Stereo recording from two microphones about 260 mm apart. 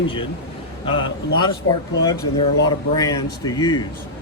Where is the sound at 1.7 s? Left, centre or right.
Left.